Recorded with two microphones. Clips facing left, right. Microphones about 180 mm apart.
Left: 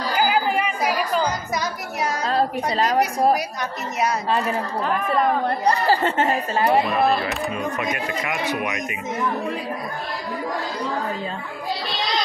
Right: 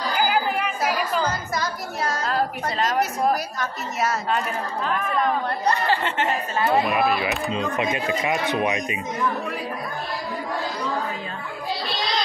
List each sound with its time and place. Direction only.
0.3 s a sound: centre (ahead or behind)
1.2 s music: 20° left (ahead or behind)
2.2 s a woman's voice: 35° left (ahead or behind)
3.5 s speech: 15° left (ahead or behind)
5.7 s speech: 40° left (ahead or behind)
6.8 s speech: 10° right (ahead or behind)
7.7 s speech: 20° right (ahead or behind)